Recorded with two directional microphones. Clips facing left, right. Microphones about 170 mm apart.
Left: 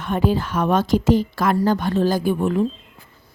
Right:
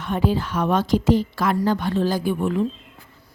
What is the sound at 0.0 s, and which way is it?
A woman's voice, 50° left (ahead or behind).